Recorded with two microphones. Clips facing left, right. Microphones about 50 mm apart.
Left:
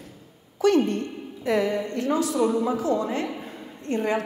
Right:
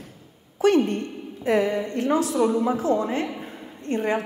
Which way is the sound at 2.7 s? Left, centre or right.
Right.